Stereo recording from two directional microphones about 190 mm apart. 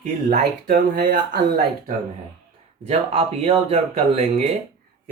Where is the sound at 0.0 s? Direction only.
45° right (ahead or behind).